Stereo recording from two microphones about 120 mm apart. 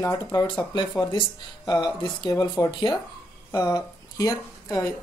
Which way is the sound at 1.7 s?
35° left (ahead or behind).